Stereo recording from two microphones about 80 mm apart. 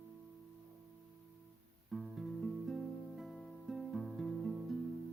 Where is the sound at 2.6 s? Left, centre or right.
Centre.